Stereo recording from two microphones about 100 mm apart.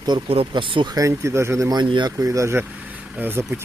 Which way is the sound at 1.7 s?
50° right (ahead or behind).